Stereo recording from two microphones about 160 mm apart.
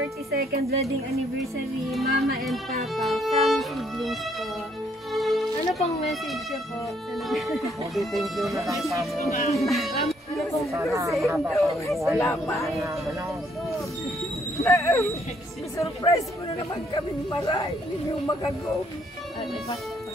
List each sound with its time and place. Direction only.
0.3 s a woman's voice: 75° right (ahead or behind)
1.4 s speech: centre (ahead or behind)
2.1 s music: 65° right (ahead or behind)
3.0 s speech: centre (ahead or behind)
5.1 s music: centre (ahead or behind)
7.2 s speech: centre (ahead or behind)
9.3 s speech: 45° left (ahead or behind)
10.6 s speech: centre (ahead or behind)
10.9 s speech: 20° right (ahead or behind)
11.3 s speech: centre (ahead or behind)
12.2 s speech: 15° left (ahead or behind)
14.6 s speech: 20° left (ahead or behind); by 17.6 s 35° left (ahead or behind)